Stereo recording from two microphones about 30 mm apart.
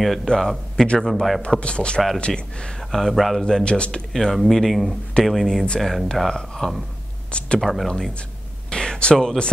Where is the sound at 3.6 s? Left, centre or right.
Left.